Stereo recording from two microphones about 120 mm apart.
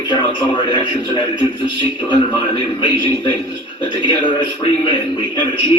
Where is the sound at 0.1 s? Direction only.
40° left (ahead or behind).